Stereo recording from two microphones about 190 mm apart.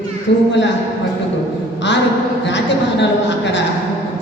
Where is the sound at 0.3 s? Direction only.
65° left (ahead or behind).